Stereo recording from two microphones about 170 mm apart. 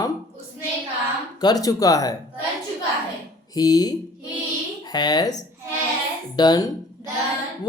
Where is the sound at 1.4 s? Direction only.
20° left (ahead or behind).